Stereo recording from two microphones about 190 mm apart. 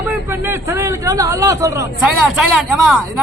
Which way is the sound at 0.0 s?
10° right (ahead or behind).